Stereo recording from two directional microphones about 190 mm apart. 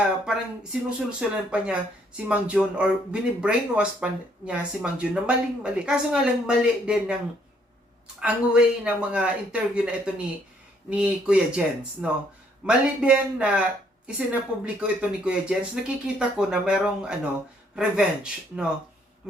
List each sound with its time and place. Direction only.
0.3 s speech: 5° right (ahead or behind)
8.2 s speech: 5° right (ahead or behind)